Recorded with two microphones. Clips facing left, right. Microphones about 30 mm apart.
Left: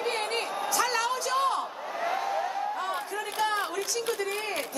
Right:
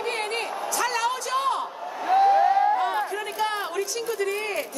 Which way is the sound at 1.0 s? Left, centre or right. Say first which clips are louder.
Right 2 dB; centre.